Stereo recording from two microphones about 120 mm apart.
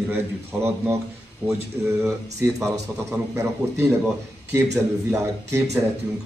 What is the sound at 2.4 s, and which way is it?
A man's voice, 20° right (ahead or behind).